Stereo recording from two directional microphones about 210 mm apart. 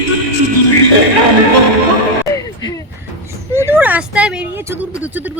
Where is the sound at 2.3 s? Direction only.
15° left (ahead or behind).